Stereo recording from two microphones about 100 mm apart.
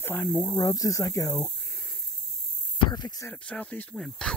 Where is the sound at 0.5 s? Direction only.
35° left (ahead or behind).